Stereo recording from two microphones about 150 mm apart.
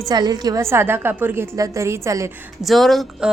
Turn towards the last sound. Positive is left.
turn(degrees=0)  # may be behind; listen again after turning